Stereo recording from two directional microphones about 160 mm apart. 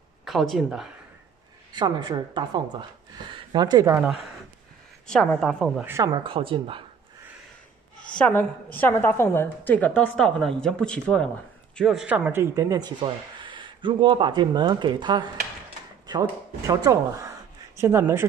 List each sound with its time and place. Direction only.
0.2 s speech: centre (ahead or behind)
1.7 s speech: 25° right (ahead or behind)
5.0 s speech: 5° left (ahead or behind)
5.8 s speech: 15° right (ahead or behind)
6.2 s a woman's voice: 35° right (ahead or behind)
8.2 s a woman's voice: 10° left (ahead or behind); by 18.2 s 15° right (ahead or behind)